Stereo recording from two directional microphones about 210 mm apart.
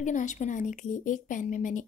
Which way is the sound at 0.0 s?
35° left (ahead or behind).